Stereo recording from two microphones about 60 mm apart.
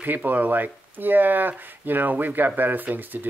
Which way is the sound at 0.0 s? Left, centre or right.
Right.